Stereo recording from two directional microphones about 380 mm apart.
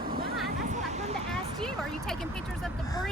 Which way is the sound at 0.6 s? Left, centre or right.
Centre.